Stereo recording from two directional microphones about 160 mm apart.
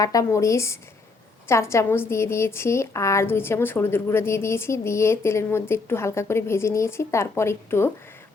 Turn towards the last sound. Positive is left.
turn(degrees=15)  # may be behind; listen again after turning